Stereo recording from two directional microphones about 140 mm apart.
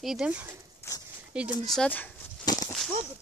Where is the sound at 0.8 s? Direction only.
20° left (ahead or behind).